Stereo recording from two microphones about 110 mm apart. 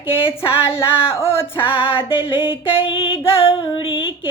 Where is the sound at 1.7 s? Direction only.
55° left (ahead or behind).